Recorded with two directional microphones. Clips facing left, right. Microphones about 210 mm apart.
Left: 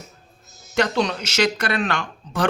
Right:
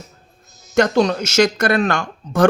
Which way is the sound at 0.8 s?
45° right (ahead or behind).